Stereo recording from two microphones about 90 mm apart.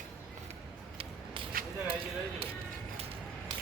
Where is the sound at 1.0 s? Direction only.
80° right.